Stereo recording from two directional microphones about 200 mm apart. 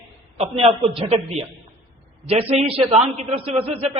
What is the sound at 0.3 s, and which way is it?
A man's voice, 30° right (ahead or behind).